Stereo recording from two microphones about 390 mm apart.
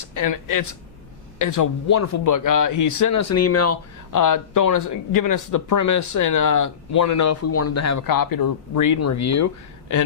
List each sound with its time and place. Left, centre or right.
0.0 s speech: left
4.1 s speech: left